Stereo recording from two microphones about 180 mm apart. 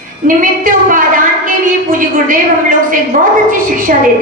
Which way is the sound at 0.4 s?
50° right (ahead or behind).